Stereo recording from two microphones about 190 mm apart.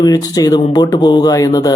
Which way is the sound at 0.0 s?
20° left (ahead or behind).